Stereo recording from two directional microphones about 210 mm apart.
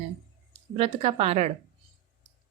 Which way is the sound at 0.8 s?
30° right (ahead or behind).